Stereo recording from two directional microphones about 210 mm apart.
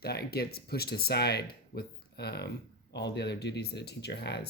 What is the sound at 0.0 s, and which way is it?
Speech, 50° left (ahead or behind).